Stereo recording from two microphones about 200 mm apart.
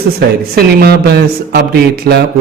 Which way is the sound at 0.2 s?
50° right (ahead or behind).